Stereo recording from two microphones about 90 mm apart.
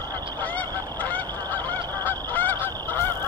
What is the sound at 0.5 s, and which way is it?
Goose, 20° left (ahead or behind).